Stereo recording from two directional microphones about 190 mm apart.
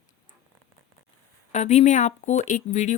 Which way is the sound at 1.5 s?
35° left (ahead or behind).